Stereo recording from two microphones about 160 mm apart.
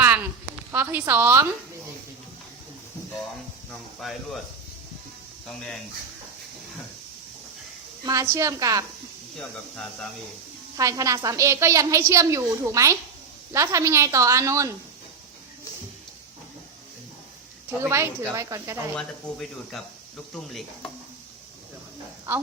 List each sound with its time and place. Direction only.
0.7 s a woman's voice: 15° right (ahead or behind)
3.7 s a sound: centre (ahead or behind)
5.5 s speech: 5° left (ahead or behind)
8.0 s a woman's voice: 20° right (ahead or behind)
9.4 s speech: 5° left (ahead or behind)
10.8 s a woman's voice: 20° right (ahead or behind)
17.7 s a woman's voice: 15° right (ahead or behind)
18.9 s speech: centre (ahead or behind)